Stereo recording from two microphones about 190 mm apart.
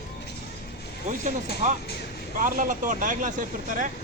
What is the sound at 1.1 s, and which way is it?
Speech, 35° right (ahead or behind).